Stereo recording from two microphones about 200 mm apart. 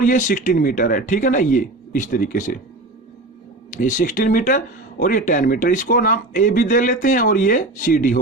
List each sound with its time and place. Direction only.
0.0 s speech: 40° left (ahead or behind)
3.7 s speech: 40° left (ahead or behind)